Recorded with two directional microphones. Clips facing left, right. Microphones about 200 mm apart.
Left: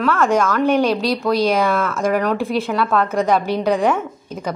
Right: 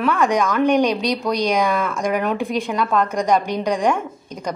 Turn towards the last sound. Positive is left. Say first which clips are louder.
# left 2 dB
turn(degrees=5)  # may be behind; listen again after turning